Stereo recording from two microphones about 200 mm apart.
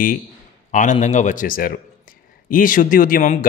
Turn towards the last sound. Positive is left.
turn(degrees=40)  # may be behind; listen again after turning